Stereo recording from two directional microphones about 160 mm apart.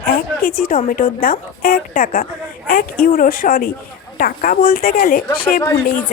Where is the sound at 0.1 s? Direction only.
60° left (ahead or behind).